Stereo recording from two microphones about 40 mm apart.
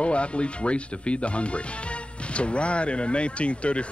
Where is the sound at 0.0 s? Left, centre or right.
Left.